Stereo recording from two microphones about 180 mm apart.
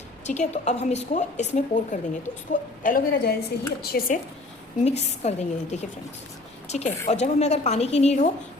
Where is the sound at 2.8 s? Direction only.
50° left (ahead or behind).